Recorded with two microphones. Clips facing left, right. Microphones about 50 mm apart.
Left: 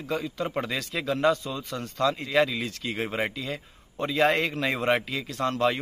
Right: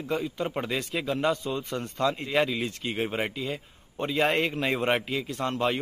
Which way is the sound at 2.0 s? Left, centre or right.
Centre.